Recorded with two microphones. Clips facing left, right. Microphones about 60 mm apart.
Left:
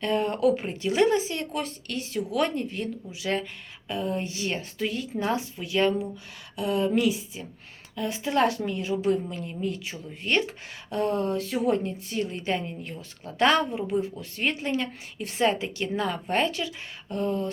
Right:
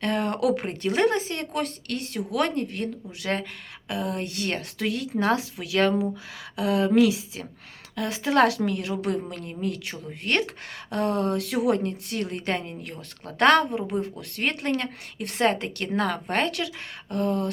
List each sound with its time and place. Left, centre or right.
0.0 s a woman's voice: right
3.8 s a woman's voice: right
5.2 s a woman's voice: right